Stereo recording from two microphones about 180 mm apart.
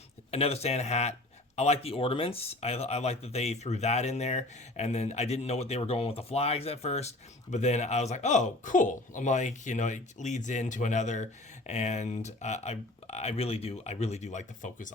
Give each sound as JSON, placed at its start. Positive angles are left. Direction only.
{"t": 0.3, "sound": "speech", "side_deg": 35}